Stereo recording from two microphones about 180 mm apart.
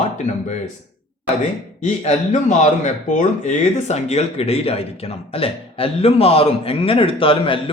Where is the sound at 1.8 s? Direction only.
40° left (ahead or behind).